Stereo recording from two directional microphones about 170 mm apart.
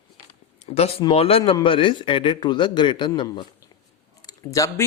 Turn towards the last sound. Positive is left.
turn(degrees=20)  # may be behind; listen again after turning